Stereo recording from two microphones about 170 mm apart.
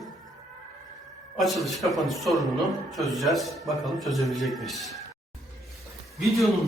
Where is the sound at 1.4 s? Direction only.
Centre (ahead or behind).